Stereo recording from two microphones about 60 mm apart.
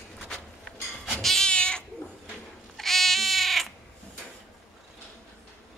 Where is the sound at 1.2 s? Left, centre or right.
Centre.